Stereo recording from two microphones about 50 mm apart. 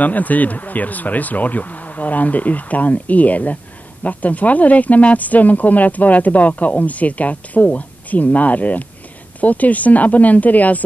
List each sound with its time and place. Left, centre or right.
0.0 s speech: left